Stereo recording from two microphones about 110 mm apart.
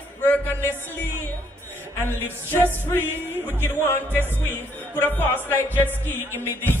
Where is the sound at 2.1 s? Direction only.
20° left (ahead or behind).